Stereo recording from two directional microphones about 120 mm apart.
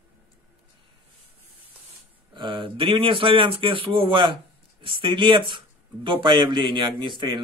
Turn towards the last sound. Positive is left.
turn(degrees=-40)  # may be behind; listen again after turning